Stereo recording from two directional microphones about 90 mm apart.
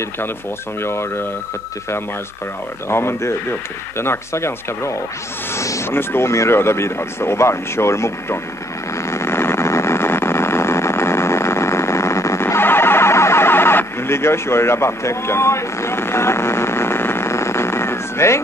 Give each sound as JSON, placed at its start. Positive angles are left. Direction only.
{"t": 2.9, "sound": "speech", "side_deg": 30}
{"t": 9.0, "sound": "vehicle", "side_deg": 30}